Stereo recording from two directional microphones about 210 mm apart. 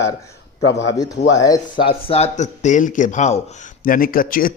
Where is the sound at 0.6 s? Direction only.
60° left (ahead or behind).